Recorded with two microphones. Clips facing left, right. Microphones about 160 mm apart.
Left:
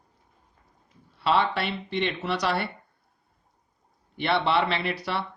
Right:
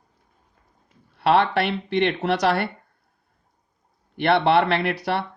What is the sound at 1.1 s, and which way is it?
Speech, 60° right (ahead or behind).